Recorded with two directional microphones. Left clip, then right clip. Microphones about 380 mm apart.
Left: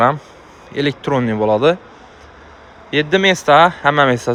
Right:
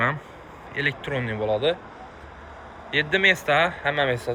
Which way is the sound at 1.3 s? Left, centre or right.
Left.